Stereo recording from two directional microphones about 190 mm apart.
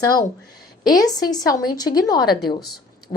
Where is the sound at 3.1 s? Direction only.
35° left (ahead or behind).